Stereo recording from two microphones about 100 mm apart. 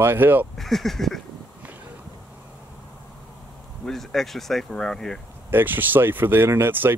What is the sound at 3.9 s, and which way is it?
Speech, 5° left (ahead or behind).